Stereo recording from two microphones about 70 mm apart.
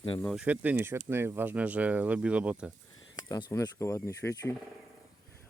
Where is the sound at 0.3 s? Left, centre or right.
Right.